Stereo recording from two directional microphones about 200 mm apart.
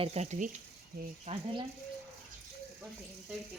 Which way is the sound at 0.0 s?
30° right (ahead or behind).